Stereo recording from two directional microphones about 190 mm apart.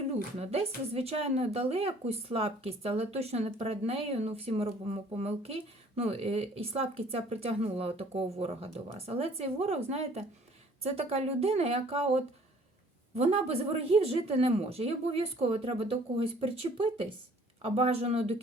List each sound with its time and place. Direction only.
0.1 s a woman's voice: 35° right (ahead or behind)